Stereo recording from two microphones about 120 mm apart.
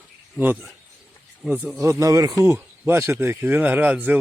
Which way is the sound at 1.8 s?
25° right (ahead or behind).